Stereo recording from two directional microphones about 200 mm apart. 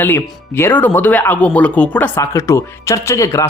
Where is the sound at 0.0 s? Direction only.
10° left (ahead or behind).